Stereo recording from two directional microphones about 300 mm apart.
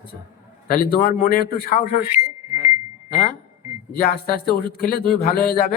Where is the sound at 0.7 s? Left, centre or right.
Left.